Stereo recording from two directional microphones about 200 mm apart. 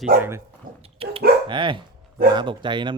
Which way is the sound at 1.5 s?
25° right (ahead or behind).